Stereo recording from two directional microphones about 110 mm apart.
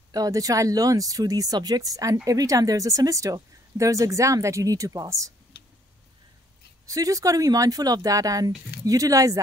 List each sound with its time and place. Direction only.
0.1 s speech: 35° right (ahead or behind)
6.9 s speech: 30° right (ahead or behind)